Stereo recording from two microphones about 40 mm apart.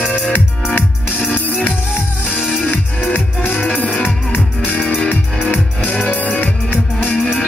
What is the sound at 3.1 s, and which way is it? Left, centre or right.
Music, left.